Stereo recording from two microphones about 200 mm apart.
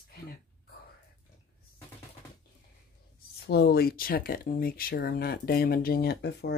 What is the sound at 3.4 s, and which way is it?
Speech, 55° left (ahead or behind).